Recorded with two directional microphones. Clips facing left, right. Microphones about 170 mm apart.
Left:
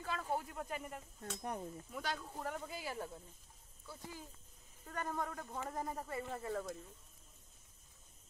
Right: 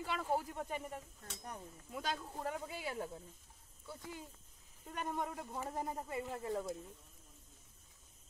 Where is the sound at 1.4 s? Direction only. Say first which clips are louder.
Left 6 dB; 30° left (ahead or behind).